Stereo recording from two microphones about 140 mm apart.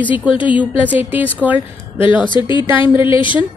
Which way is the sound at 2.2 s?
35° left (ahead or behind).